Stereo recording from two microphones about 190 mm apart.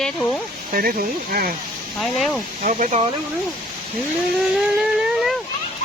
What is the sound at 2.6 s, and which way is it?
Speech, 40° right (ahead or behind).